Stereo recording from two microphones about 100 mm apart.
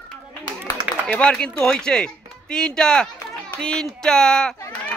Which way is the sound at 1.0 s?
10° left (ahead or behind).